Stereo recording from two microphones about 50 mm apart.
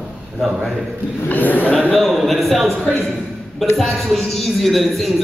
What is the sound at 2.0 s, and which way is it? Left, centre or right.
Speech, centre.